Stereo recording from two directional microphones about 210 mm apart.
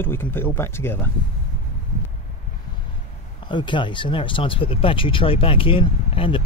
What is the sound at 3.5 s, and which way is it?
Speech, 20° left (ahead or behind).